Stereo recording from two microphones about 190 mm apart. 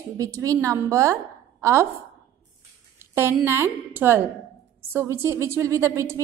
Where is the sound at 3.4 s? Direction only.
15° right (ahead or behind).